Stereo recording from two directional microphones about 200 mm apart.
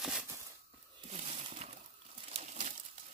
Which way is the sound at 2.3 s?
35° right (ahead or behind).